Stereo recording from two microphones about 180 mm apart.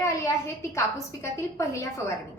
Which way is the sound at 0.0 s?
15° left (ahead or behind).